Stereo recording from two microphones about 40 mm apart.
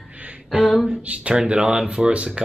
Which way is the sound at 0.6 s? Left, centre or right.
Centre.